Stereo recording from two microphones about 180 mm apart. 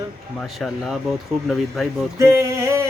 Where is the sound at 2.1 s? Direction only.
15° right (ahead or behind).